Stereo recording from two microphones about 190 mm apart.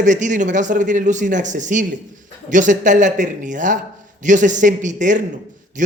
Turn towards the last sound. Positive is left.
turn(degrees=-40)  # may be behind; listen again after turning